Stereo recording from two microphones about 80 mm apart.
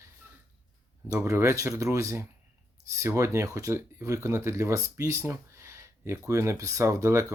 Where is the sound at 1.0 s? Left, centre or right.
Right.